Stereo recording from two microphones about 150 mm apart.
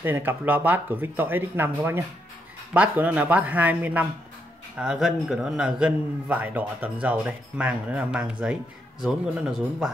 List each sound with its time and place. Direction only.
0.0 s a man's voice: 15° right (ahead or behind)